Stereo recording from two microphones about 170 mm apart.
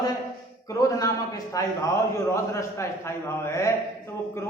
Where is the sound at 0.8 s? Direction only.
20° left (ahead or behind).